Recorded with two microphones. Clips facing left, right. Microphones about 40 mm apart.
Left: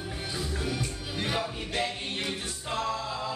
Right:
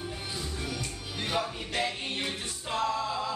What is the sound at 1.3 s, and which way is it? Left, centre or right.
Music, centre.